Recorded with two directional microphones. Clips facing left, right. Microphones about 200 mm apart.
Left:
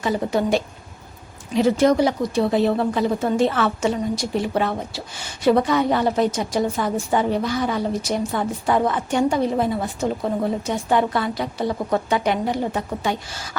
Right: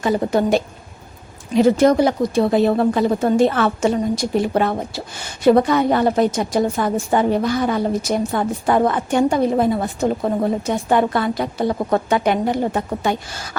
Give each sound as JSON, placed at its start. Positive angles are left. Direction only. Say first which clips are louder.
{"t": 0.0, "sound": "a woman's voice", "louder": "right 4 dB", "side_deg": -50}